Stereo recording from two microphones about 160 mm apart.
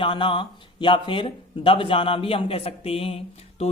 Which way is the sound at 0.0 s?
30° left (ahead or behind).